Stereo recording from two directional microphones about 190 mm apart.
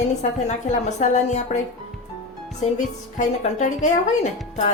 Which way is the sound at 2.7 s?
40° left (ahead or behind).